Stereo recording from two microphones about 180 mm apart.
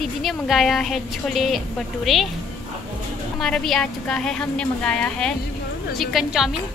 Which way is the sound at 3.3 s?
Centre (ahead or behind).